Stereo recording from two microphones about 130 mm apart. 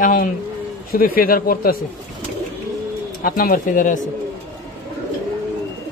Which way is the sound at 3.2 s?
90° left.